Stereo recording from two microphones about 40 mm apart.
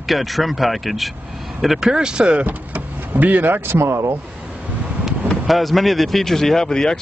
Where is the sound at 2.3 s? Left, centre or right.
Right.